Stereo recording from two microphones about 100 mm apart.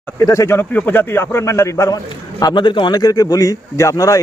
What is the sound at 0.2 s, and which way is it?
A man's voice, 30° left (ahead or behind).